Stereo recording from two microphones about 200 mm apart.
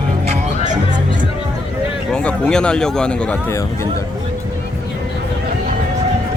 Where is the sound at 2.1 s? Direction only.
5° left (ahead or behind).